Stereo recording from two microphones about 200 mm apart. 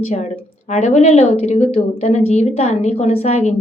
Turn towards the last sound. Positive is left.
turn(degrees=30)  # may be behind; listen again after turning